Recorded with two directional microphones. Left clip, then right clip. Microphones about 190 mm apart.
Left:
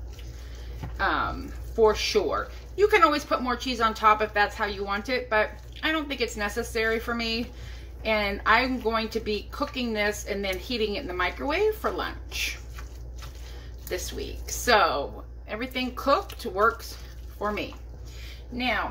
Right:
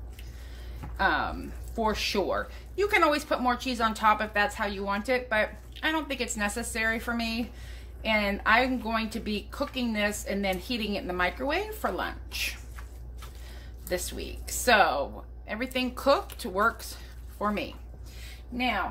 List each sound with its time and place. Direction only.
0.9 s speech: 50° right (ahead or behind)
13.8 s speech: 45° right (ahead or behind)